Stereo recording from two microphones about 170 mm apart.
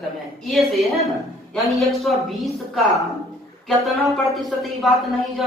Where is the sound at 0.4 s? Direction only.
Centre (ahead or behind).